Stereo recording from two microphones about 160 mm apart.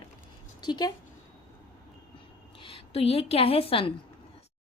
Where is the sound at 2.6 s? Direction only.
35° left (ahead or behind).